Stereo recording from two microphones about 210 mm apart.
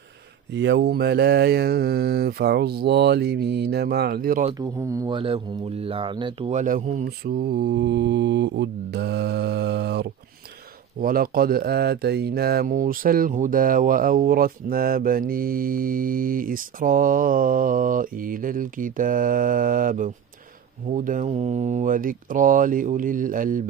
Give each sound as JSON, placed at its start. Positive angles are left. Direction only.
{"t": 0.5, "sound": "mantra", "side_deg": -55}
{"t": 4.6, "sound": "speech", "side_deg": -15}
{"t": 6.5, "sound": "mantra", "side_deg": -35}
{"t": 11.0, "sound": "speech", "side_deg": -45}